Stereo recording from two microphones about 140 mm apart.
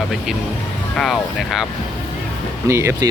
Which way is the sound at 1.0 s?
Centre (ahead or behind).